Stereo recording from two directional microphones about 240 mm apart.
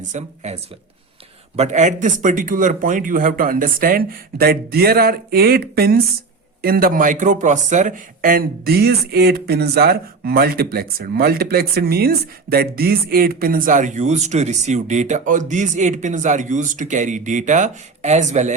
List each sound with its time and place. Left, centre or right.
0.1 s speech: right